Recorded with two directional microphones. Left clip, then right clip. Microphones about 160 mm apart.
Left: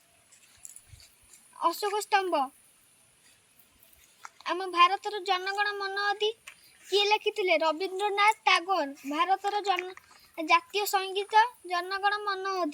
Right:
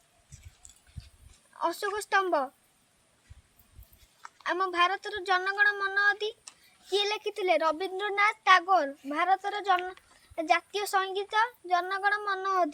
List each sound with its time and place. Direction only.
1.5 s speech: 20° right (ahead or behind)
4.4 s speech: 20° right (ahead or behind)